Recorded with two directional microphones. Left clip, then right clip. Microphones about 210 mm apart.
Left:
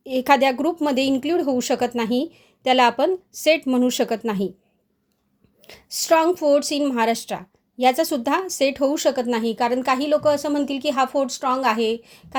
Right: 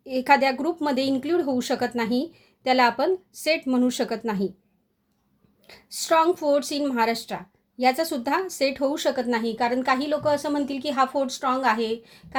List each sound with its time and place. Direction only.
0.0 s speech: 30° left (ahead or behind)
5.6 s speech: 30° left (ahead or behind)